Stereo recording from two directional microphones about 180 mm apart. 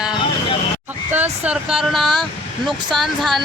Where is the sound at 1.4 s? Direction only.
5° right (ahead or behind).